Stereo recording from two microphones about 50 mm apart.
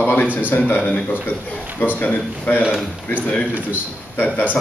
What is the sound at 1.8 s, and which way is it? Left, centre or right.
Speech, left.